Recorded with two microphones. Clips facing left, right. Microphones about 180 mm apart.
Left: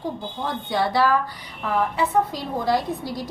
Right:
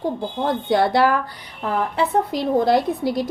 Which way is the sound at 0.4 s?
55° right (ahead or behind).